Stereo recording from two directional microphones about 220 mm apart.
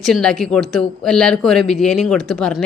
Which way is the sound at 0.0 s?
Centre (ahead or behind).